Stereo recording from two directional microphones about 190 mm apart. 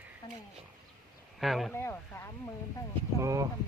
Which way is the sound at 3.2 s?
15° right (ahead or behind).